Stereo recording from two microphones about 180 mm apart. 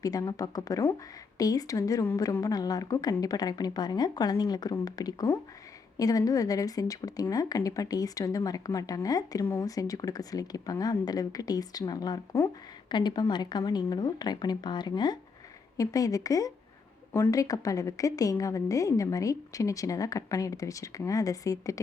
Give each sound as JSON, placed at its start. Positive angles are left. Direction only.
{"t": 0.0, "sound": "a woman's voice", "side_deg": 20}